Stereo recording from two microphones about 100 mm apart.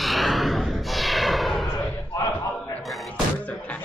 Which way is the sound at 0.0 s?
Centre (ahead or behind).